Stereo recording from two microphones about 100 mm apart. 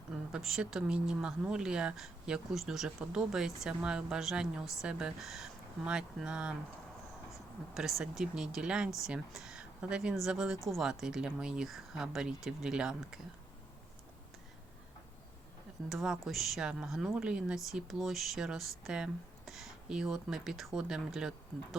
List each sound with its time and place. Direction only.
0.3 s speech: 5° right (ahead or behind)
7.7 s speech: 5° right (ahead or behind)
15.9 s speech: centre (ahead or behind)